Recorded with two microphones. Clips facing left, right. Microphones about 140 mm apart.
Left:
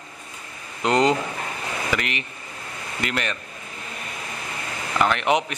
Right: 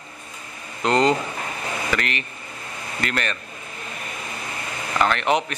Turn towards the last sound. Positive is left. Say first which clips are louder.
# even
turn(degrees=15)  # may be behind; listen again after turning